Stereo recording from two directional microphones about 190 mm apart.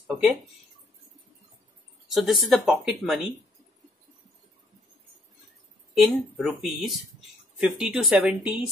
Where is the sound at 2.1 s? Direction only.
Centre (ahead or behind).